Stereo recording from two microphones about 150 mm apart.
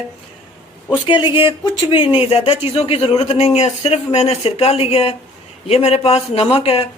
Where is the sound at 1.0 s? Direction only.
35° left (ahead or behind).